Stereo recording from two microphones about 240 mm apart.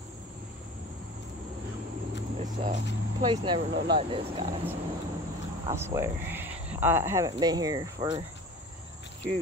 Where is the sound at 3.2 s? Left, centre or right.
Centre.